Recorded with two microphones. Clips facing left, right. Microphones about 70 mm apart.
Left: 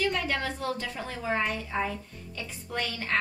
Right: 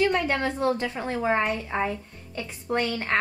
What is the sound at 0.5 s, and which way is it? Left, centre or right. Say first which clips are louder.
Speech: right 7 dB; right.